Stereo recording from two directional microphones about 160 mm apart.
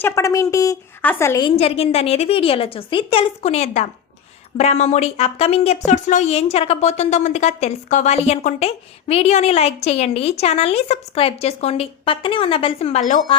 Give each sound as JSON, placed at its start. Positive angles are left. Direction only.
{"t": 0.0, "sound": "a woman's voice", "side_deg": 20}
{"t": 1.5, "sound": "speech", "side_deg": 40}